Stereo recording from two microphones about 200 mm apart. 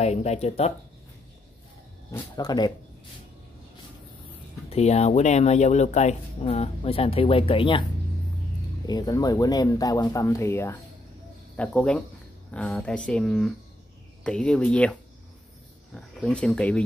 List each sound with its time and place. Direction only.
0.0 s speech: 35° left (ahead or behind)
2.0 s speech: 15° left (ahead or behind)
4.6 s speech: 30° left (ahead or behind)
8.8 s speech: 20° left (ahead or behind)